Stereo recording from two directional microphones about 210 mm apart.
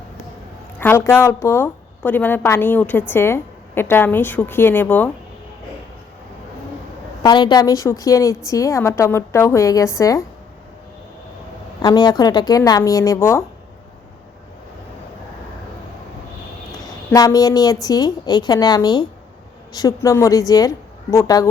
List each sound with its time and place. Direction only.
0.8 s a woman's voice: 10° left (ahead or behind)
7.2 s a woman's voice: 20° left (ahead or behind)
11.8 s a woman's voice: 20° left (ahead or behind)
17.1 s a woman's voice: 15° left (ahead or behind)